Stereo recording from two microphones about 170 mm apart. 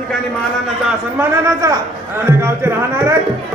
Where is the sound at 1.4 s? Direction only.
20° right (ahead or behind).